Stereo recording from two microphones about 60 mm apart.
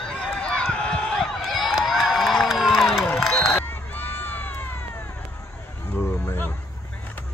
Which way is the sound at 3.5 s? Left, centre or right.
Left.